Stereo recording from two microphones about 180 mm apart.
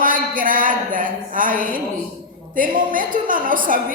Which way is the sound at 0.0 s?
50° right (ahead or behind).